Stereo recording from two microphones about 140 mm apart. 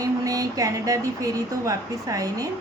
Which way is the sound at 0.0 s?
25° right (ahead or behind).